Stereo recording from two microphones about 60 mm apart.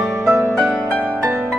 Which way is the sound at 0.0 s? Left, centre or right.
Right.